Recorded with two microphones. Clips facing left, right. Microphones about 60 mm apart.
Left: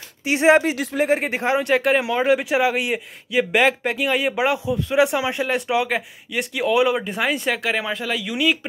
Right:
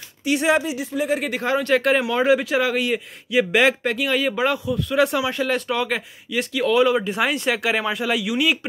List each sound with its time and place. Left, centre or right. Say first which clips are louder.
0.2 s speech: left 4 dB; left
1.7 s speech: right 2 dB; centre